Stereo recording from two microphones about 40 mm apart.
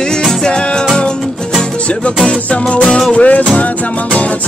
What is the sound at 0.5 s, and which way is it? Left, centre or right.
Music, left.